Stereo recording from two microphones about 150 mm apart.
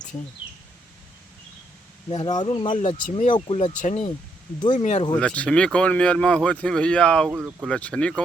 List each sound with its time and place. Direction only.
2.0 s speech: 30° left (ahead or behind)
2.7 s speech: 55° left (ahead or behind)
3.3 s speech: 35° left (ahead or behind)
3.6 s speech: 55° left (ahead or behind)
5.1 s speech: 10° left (ahead or behind)
7.3 s speech: 10° right (ahead or behind)
7.7 s speech: 5° left (ahead or behind)